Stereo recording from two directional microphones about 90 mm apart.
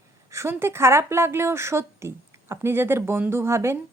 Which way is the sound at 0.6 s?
30° right (ahead or behind).